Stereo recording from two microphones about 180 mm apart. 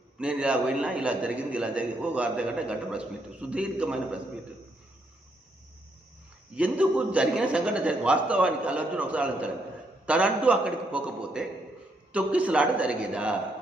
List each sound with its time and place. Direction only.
0.2 s a man's voice: 5° right (ahead or behind)
6.6 s a man's voice: 5° right (ahead or behind)